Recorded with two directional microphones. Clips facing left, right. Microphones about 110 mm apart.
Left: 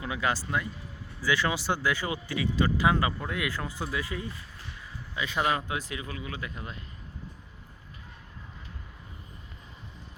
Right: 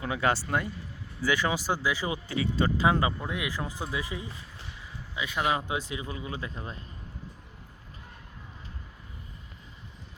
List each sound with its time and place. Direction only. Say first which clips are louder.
0.0 s speech: right 2 dB; 30° right (ahead or behind)
2.0 s a man's voice: right 1 dB; centre (ahead or behind)
2.4 s speech: even; 25° right (ahead or behind)
5.1 s a man's voice: left 1 dB; 5° right (ahead or behind)
5.5 s speech: right 1 dB; 20° right (ahead or behind)